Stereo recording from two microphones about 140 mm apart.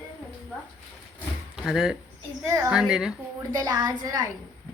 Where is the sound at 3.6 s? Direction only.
30° right (ahead or behind).